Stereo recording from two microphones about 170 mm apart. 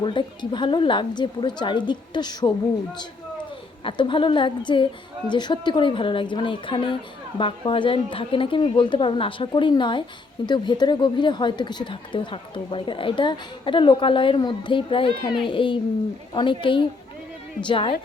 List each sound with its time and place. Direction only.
0.0 s a woman's voice: 25° left (ahead or behind)
3.8 s a woman's voice: 30° left (ahead or behind)